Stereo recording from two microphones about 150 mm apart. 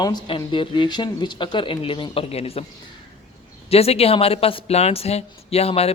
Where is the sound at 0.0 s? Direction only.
30° left (ahead or behind).